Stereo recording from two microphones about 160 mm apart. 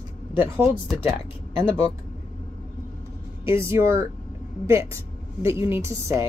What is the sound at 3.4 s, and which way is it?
A woman's voice, 15° right (ahead or behind).